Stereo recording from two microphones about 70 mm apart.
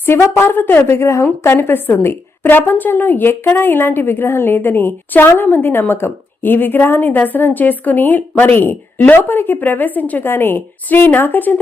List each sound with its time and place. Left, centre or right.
0.0 s a woman's voice: left